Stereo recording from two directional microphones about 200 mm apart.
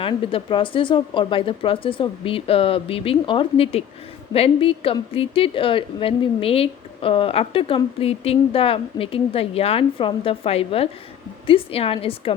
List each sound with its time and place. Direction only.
0.0 s a woman's voice: 25° left (ahead or behind)